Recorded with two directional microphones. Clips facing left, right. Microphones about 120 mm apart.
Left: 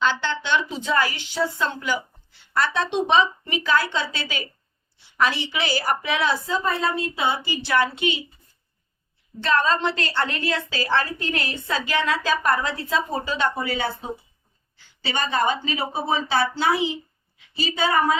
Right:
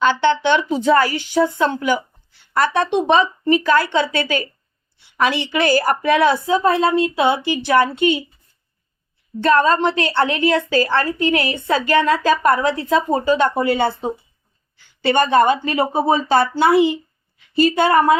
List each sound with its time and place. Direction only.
0.1 s speech: 60° right (ahead or behind)
0.8 s a woman's voice: 40° right (ahead or behind); by 7.6 s 70° right (ahead or behind)
7.8 s a woman's voice: 50° right (ahead or behind)
9.4 s a woman's voice: 50° right (ahead or behind)
16.3 s a woman's voice: 55° right (ahead or behind)